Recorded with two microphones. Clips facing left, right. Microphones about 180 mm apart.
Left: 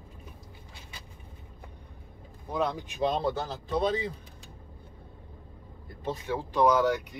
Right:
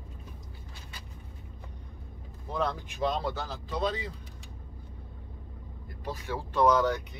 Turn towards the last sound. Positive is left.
turn(degrees=10)  # may be behind; listen again after turning